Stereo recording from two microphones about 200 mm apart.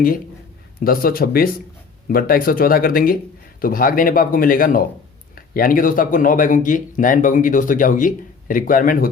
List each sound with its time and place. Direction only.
0.9 s a man's voice: 45° left (ahead or behind)